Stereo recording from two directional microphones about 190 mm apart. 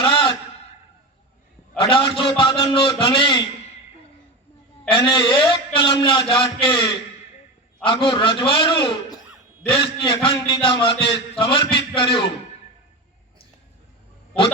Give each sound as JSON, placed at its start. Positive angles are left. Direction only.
{"t": 0.0, "sound": "a sound", "side_deg": 25}
{"t": 1.8, "sound": "a man's voice", "side_deg": 25}
{"t": 4.9, "sound": "a man's voice", "side_deg": 25}